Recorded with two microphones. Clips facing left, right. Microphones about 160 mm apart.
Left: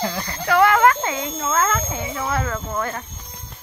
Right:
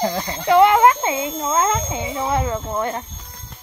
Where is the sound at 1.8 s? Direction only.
15° right (ahead or behind).